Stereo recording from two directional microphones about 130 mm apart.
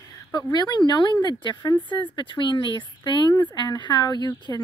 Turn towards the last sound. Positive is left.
turn(degrees=35)  # may be behind; listen again after turning